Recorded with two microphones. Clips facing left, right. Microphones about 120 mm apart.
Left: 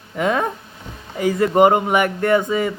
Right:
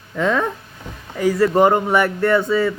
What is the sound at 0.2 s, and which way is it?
Speech, 55° left (ahead or behind).